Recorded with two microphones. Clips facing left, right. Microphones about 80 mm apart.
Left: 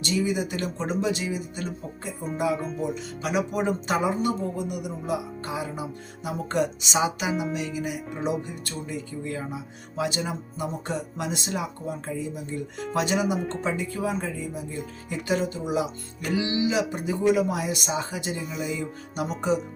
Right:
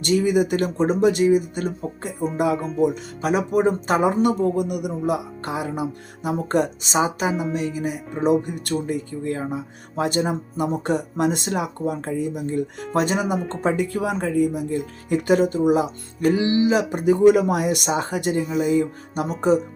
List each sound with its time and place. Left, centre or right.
0.0 s speech: right
2.6 s music: centre
2.8 s speech: right
4.2 s speech: right
7.3 s music: centre
7.5 s speech: right
8.4 s speech: right
8.9 s speech: right
13.2 s music: centre
13.5 s speech: right
13.7 s speech: right